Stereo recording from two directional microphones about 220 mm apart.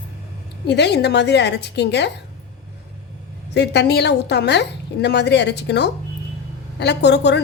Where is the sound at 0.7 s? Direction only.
50° left (ahead or behind).